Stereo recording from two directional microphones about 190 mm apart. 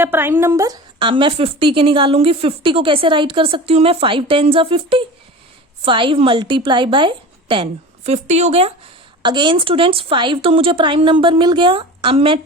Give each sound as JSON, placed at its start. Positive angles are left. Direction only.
{"t": 0.0, "sound": "a woman's voice", "side_deg": -10}